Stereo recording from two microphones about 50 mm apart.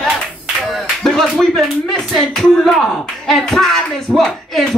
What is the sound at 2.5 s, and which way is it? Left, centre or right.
Speech, centre.